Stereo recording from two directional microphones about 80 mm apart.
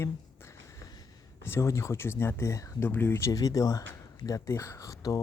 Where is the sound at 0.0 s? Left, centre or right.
Left.